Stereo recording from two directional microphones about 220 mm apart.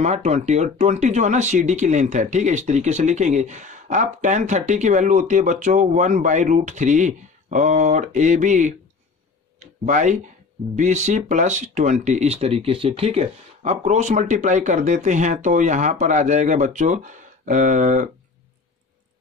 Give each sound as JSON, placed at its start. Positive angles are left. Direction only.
{"t": 0.0, "sound": "speech", "side_deg": -30}
{"t": 9.6, "sound": "a sound", "side_deg": -35}
{"t": 10.8, "sound": "speech", "side_deg": -30}